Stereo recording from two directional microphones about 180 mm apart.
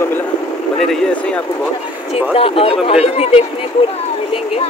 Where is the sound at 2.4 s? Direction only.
30° left (ahead or behind).